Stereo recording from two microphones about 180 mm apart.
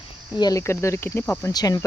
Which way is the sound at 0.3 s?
20° left (ahead or behind).